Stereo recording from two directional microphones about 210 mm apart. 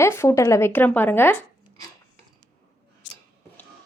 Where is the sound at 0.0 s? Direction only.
15° left (ahead or behind).